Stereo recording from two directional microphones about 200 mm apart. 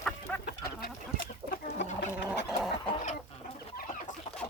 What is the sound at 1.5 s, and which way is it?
Chicken, 60° left (ahead or behind).